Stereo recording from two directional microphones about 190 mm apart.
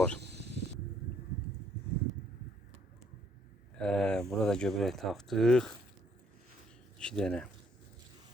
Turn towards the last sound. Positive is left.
turn(degrees=5)  # may be behind; listen again after turning